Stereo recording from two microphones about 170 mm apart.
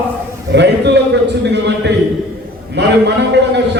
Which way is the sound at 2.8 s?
90° right.